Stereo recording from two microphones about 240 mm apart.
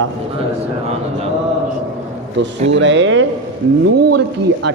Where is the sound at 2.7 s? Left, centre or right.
Right.